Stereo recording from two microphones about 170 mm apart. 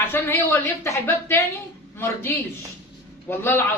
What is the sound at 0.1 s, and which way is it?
Speech, 15° left (ahead or behind).